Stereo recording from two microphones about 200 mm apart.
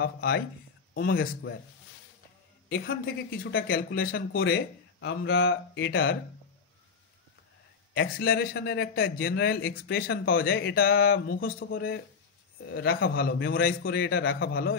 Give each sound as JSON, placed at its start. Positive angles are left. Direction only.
{"t": 0.0, "sound": "a man's voice", "side_deg": 50}
{"t": 2.7, "sound": "a man's voice", "side_deg": 45}
{"t": 4.5, "sound": "speech", "side_deg": 60}
{"t": 7.9, "sound": "a man's voice", "side_deg": 50}
{"t": 11.6, "sound": "speech", "side_deg": 65}
{"t": 12.6, "sound": "a man's voice", "side_deg": 50}